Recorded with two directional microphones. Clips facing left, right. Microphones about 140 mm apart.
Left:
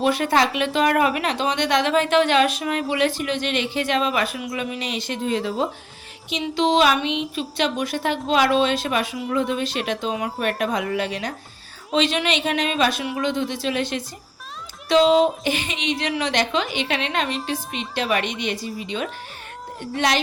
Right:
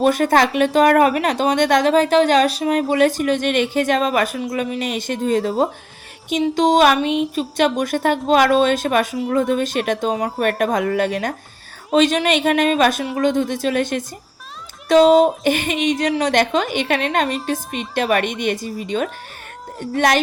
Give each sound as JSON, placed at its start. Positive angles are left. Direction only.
{"t": 0.0, "sound": "a woman's voice", "side_deg": -45}